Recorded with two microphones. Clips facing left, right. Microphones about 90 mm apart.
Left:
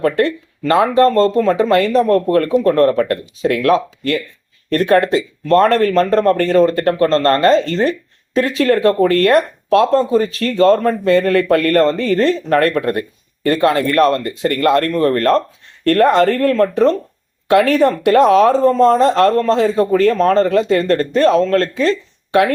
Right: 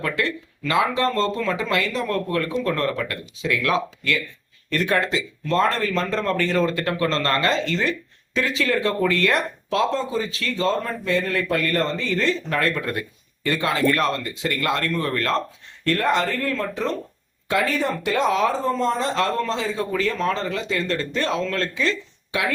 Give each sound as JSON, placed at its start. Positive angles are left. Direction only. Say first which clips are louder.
{"t": 0.0, "sound": "speech", "louder": "left 10 dB", "side_deg": 45}
{"t": 17.5, "sound": "speech", "louder": "left 11 dB", "side_deg": 65}